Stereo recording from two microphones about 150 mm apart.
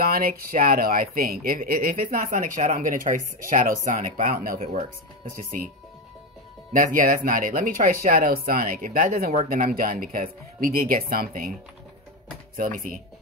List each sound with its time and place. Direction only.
0.0 s speech: 80° right
12.5 s speech: 65° right (ahead or behind)